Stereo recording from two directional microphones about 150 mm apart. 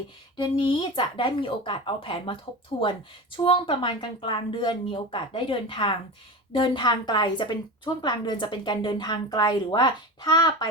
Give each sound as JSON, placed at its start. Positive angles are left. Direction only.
{"t": 0.3, "sound": "a woman's voice", "side_deg": 30}